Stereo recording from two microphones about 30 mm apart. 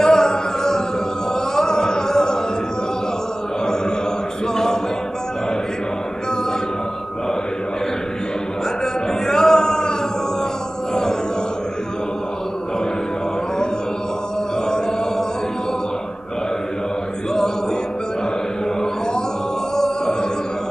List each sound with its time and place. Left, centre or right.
0.0 s music: left
9.2 s music: centre
19.8 s a sound: centre